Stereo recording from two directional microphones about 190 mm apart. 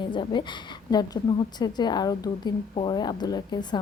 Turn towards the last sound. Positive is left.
turn(degrees=20)  # may be behind; listen again after turning